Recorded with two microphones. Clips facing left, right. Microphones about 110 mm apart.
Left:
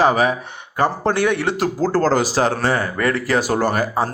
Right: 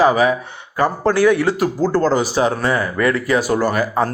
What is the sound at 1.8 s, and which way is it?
Speech, 40° left (ahead or behind).